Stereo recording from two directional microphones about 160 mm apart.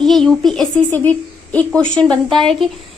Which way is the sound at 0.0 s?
5° left (ahead or behind).